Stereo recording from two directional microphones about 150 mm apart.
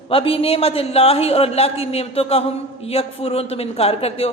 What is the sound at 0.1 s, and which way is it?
A man's voice, 40° left (ahead or behind).